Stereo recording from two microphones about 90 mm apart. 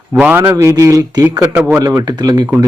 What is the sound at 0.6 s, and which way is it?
Speech, 35° right (ahead or behind).